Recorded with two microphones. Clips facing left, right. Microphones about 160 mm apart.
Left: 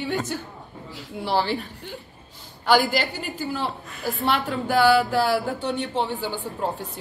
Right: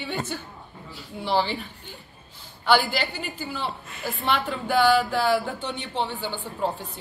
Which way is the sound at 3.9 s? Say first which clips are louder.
Left 2 dB; 5° left (ahead or behind).